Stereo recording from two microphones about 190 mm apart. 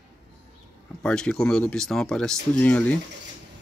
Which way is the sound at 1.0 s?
5° left (ahead or behind).